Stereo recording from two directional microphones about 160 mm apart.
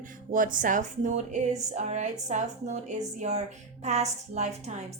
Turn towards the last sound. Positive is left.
turn(degrees=-45)  # may be behind; listen again after turning